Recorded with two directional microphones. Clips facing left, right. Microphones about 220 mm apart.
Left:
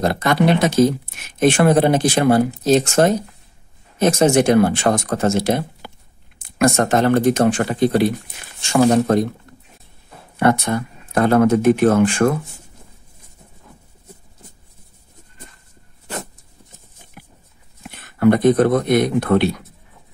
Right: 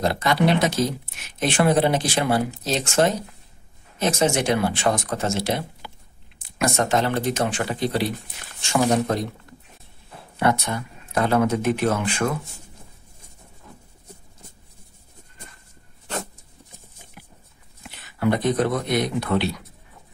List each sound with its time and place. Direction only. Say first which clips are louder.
0.0 s speech: left 4 dB; 50° left (ahead or behind)
10.4 s speech: left 6 dB; 50° left (ahead or behind)
17.8 s speech: left 8 dB; 55° left (ahead or behind)